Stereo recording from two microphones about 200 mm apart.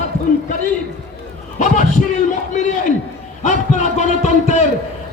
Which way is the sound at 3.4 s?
35° left (ahead or behind).